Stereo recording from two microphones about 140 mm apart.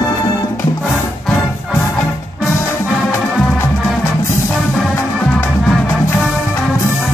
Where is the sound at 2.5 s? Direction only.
20° left (ahead or behind).